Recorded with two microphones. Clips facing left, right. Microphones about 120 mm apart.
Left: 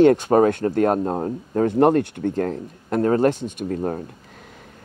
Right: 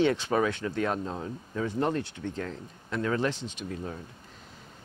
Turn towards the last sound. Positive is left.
turn(degrees=50)  # may be behind; listen again after turning